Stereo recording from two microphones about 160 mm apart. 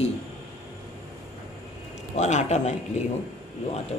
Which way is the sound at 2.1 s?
45° left (ahead or behind).